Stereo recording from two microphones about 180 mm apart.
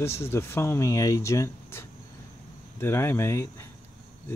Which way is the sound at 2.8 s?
15° left (ahead or behind).